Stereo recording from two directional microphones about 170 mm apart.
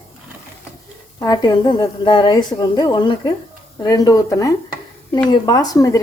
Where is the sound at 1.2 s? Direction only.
25° left (ahead or behind).